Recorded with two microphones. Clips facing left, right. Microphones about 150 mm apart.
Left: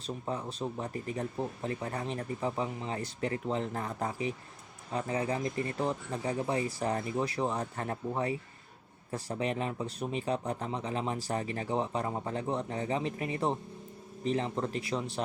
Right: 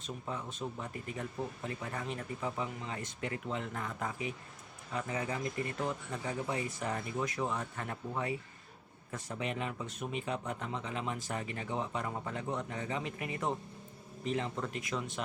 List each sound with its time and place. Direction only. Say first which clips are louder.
0.0 s speech: left 5 dB; 35° left (ahead or behind)